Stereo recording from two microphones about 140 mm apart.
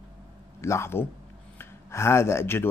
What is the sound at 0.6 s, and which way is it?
A man's voice, 20° left (ahead or behind).